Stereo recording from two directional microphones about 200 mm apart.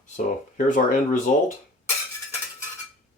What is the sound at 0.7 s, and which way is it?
Speech, 40° left (ahead or behind).